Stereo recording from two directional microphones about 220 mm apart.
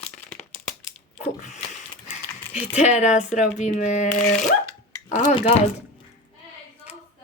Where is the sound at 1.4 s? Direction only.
30° left (ahead or behind).